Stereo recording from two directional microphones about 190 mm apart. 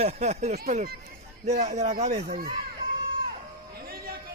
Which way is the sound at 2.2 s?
50° right (ahead or behind).